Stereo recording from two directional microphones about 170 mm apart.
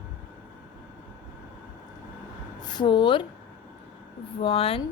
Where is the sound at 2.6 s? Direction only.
25° left (ahead or behind).